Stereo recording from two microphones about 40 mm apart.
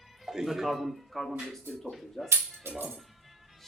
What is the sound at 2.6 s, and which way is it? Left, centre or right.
Speech, right.